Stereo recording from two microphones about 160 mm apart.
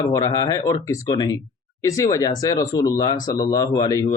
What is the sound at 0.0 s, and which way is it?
A man's voice, 25° left (ahead or behind).